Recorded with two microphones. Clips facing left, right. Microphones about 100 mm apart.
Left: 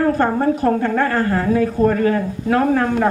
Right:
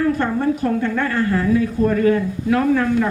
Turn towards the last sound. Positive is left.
turn(degrees=45)  # may be behind; listen again after turning